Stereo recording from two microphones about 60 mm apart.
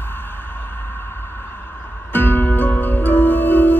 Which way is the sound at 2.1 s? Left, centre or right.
Left.